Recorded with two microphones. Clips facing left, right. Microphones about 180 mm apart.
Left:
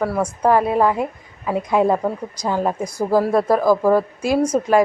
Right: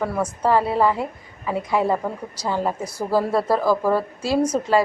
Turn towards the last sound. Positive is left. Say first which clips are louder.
# left 3 dB
turn(degrees=10)  # may be behind; listen again after turning